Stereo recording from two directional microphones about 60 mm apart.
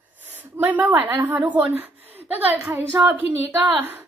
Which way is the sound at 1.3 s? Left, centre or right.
Right.